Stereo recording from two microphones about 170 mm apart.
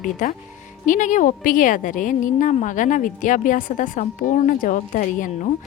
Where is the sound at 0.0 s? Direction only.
50° left (ahead or behind).